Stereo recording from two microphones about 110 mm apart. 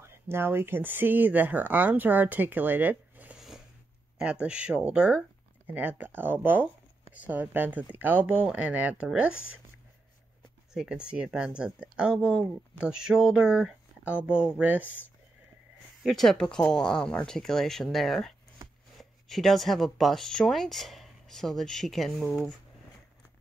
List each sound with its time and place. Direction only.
0.0 s speech: 20° right (ahead or behind)
3.3 s a sound: 5° right (ahead or behind)
4.2 s speech: 10° right (ahead or behind)
10.7 s speech: 5° right (ahead or behind)
16.0 s speech: centre (ahead or behind)
18.6 s a sound: 35° right (ahead or behind)
18.9 s speech: centre (ahead or behind)